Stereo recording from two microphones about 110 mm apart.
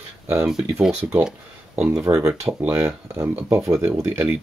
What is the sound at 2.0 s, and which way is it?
Speech, 30° right (ahead or behind).